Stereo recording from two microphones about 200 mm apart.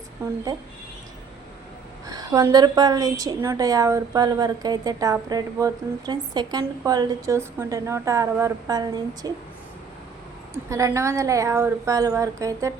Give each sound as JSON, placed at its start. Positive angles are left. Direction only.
{"t": 2.0, "sound": "a woman's voice", "side_deg": -20}
{"t": 10.7, "sound": "a woman's voice", "side_deg": -15}